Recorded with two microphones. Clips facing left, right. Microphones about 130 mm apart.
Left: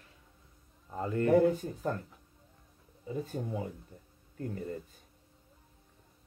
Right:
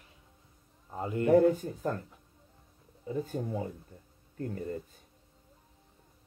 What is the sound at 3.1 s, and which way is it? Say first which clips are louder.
Speech: right 2 dB; 35° right (ahead or behind).